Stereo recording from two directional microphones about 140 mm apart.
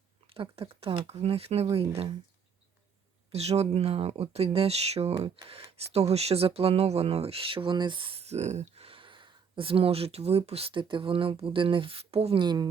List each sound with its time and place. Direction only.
0.3 s speech: 40° right (ahead or behind)
3.3 s speech: 50° right (ahead or behind)
12.4 s a woman's voice: 30° right (ahead or behind)